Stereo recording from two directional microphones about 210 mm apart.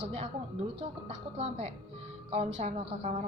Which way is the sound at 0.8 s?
30° right (ahead or behind).